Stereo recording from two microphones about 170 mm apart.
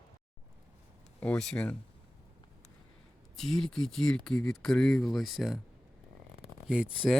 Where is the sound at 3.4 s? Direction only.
Centre (ahead or behind).